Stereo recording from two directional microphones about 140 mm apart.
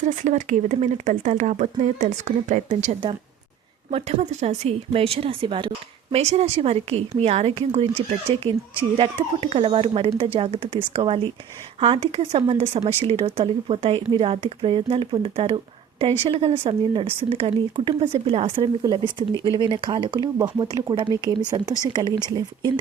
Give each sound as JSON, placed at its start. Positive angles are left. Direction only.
{"t": 0.0, "sound": "speech", "side_deg": -60}
{"t": 3.9, "sound": "speech", "side_deg": -55}